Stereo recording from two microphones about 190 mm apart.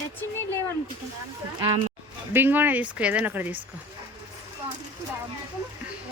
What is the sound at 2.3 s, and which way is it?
Speech, 10° right (ahead or behind).